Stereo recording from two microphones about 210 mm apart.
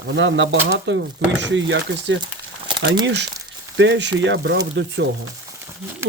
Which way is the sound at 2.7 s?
20° right (ahead or behind).